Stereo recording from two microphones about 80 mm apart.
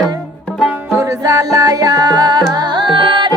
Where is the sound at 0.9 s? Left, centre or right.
Right.